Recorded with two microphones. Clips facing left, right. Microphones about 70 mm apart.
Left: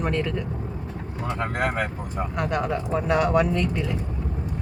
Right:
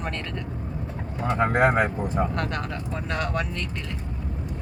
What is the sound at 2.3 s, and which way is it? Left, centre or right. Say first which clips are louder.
Speech: left 4 dB; centre.